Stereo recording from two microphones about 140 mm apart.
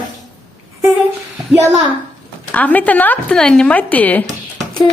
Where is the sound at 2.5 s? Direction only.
10° left (ahead or behind).